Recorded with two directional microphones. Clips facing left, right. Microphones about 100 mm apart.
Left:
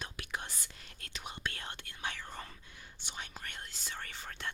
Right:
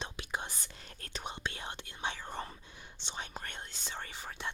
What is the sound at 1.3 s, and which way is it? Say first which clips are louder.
Whispering: right 1 dB; 20° right (ahead or behind).